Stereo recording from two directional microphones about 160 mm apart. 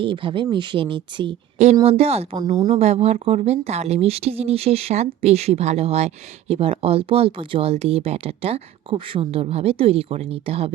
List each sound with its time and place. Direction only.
0.0 s speech: 30° right (ahead or behind)